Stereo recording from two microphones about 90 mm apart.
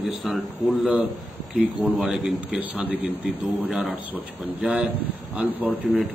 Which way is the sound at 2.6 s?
20° right (ahead or behind).